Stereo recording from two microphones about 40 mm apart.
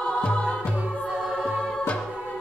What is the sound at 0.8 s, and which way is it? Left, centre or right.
Music, right.